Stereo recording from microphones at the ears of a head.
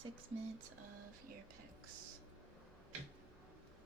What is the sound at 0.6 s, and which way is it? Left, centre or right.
Whispering, right.